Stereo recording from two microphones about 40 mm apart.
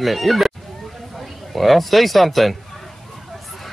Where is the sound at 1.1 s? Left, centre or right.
Centre.